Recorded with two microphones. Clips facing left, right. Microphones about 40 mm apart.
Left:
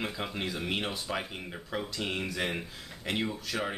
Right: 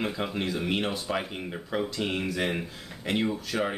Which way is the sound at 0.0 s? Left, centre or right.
Centre.